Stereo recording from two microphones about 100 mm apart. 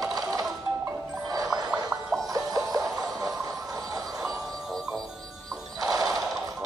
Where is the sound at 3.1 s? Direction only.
35° right (ahead or behind).